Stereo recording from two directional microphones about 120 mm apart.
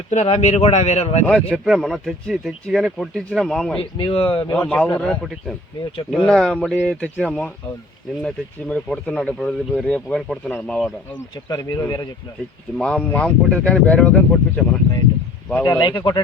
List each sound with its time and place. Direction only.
0.1 s speech: 70° left (ahead or behind)
1.3 s speech: 5° left (ahead or behind)
3.9 s speech: 50° left (ahead or behind)
4.5 s speech: 10° left (ahead or behind)
10.8 s speech: centre (ahead or behind)
11.4 s speech: 30° left (ahead or behind)
12.7 s speech: 5° left (ahead or behind)
15.6 s speech: 40° left (ahead or behind)